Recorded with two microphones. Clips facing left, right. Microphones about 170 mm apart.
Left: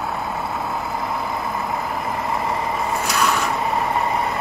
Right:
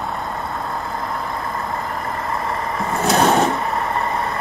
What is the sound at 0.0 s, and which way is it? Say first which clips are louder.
Vehicle: even; 5° left (ahead or behind).